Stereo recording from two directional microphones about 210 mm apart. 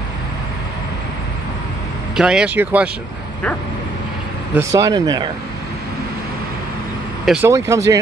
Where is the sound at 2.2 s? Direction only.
5° right (ahead or behind).